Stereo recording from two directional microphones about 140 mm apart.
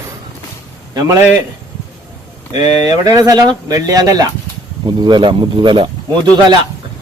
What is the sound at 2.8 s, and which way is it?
Speech, 25° right (ahead or behind).